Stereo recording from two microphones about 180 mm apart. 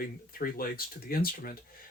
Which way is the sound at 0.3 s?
55° left (ahead or behind).